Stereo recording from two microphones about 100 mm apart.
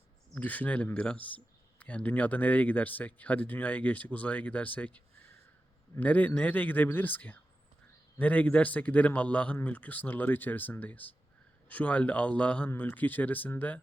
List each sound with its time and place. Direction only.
0.3 s speech: 15° left (ahead or behind)